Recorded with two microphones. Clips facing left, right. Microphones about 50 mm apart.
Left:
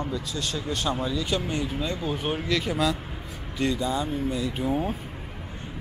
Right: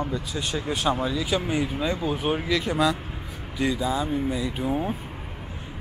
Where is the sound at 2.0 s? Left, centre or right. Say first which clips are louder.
Right 3 dB; centre.